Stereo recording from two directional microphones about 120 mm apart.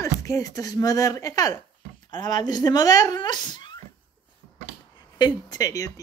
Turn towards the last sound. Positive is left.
turn(degrees=30)  # may be behind; listen again after turning